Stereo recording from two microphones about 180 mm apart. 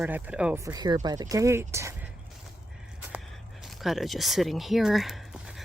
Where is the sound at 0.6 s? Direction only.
20° right (ahead or behind).